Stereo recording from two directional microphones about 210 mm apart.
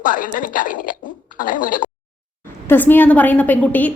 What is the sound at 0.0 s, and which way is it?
Speech, 40° left (ahead or behind).